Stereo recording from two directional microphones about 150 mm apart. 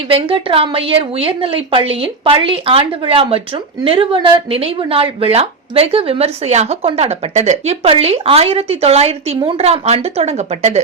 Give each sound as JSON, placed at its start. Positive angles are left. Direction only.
{"t": 0.1, "sound": "a woman's voice", "side_deg": -35}